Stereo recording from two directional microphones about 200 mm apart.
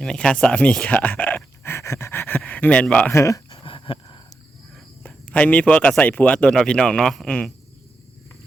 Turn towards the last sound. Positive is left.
turn(degrees=0)  # may be behind; listen again after turning